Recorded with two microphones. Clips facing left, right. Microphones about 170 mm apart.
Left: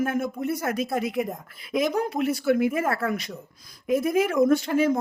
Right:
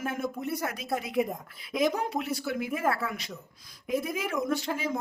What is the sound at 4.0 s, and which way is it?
Speech, 50° left (ahead or behind).